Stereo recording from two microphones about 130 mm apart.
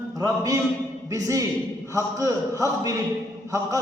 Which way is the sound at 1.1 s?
25° right (ahead or behind).